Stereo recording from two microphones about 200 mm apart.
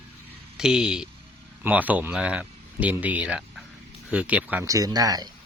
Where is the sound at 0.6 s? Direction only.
5° right (ahead or behind).